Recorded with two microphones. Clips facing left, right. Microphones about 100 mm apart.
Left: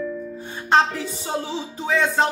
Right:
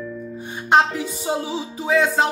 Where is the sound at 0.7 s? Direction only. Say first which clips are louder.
Right 1 dB; 15° right (ahead or behind).